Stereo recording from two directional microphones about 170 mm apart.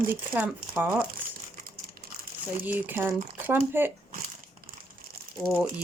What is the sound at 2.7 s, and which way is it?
Speech, 10° right (ahead or behind).